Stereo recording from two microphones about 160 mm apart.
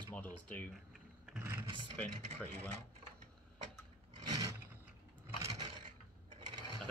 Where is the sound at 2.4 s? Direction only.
10° left (ahead or behind).